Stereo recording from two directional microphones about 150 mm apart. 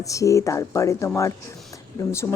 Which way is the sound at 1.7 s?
20° left (ahead or behind).